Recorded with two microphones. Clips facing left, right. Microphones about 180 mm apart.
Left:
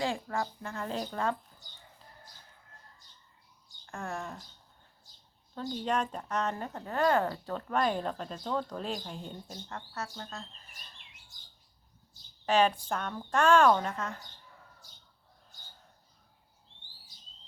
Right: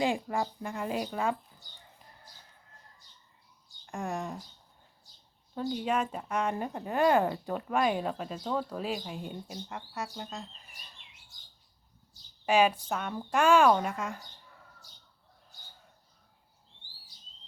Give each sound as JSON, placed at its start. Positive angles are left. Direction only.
{"t": 0.0, "sound": "speech", "side_deg": -15}
{"t": 3.8, "sound": "speech", "side_deg": -15}
{"t": 5.5, "sound": "speech", "side_deg": -10}
{"t": 12.5, "sound": "speech", "side_deg": -10}